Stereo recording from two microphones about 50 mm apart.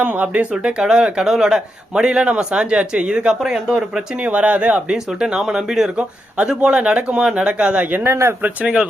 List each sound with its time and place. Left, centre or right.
0.0 s speech: right
0.5 s a man's voice: centre
4.2 s a man's voice: right; by 5.9 s centre
6.0 s speech: right
7.9 s speech: right
8.4 s speech: right